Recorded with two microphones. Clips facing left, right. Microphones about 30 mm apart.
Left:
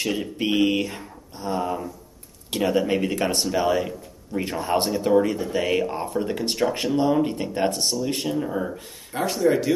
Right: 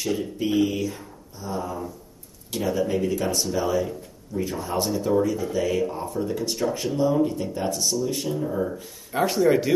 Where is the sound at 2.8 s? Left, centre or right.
Left.